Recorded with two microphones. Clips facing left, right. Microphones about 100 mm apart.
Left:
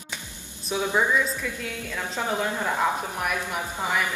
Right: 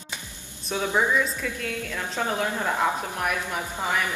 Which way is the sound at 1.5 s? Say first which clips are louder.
Right 2 dB; 15° left (ahead or behind).